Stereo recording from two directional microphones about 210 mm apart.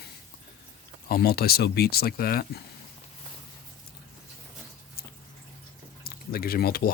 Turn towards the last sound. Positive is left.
turn(degrees=45)  # may be behind; listen again after turning